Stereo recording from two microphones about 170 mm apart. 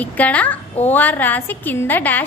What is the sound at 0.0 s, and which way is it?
A woman's voice, 10° left (ahead or behind).